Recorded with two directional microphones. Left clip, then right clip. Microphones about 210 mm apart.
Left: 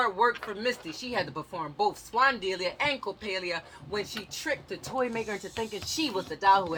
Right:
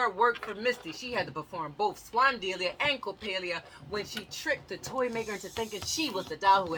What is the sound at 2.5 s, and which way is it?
Speech, 10° left (ahead or behind).